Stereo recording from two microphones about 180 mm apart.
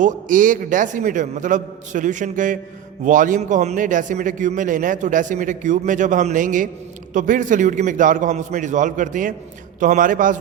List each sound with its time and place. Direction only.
0.0 s a man's voice: 45° right (ahead or behind)